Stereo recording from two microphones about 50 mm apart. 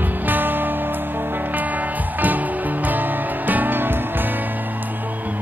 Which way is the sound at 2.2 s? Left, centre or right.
Right.